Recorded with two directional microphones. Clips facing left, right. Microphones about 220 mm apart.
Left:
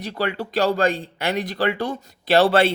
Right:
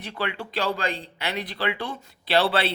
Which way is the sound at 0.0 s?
40° left (ahead or behind).